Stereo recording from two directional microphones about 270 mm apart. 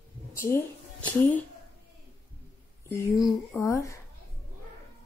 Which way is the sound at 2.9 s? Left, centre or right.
Centre.